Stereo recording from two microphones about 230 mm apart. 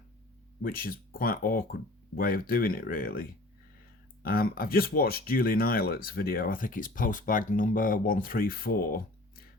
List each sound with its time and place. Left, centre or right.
0.6 s speech: left